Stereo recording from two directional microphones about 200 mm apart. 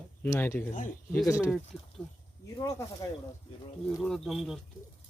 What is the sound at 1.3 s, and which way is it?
Speech, 5° right (ahead or behind).